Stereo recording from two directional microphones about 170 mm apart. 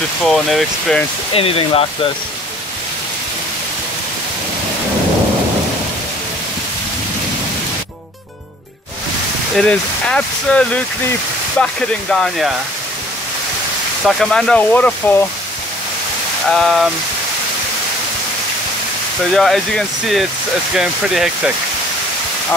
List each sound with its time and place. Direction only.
0.2 s speech: centre (ahead or behind)
1.3 s speech: 35° left (ahead or behind)
9.6 s speech: 5° left (ahead or behind)
14.0 s speech: centre (ahead or behind)
16.4 s speech: centre (ahead or behind)
19.3 s speech: centre (ahead or behind)